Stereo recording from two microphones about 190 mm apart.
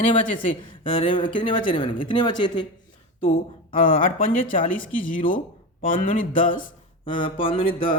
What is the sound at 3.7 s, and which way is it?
Speech, 45° left (ahead or behind).